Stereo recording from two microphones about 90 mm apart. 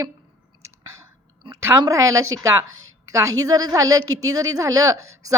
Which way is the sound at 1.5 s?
30° right (ahead or behind).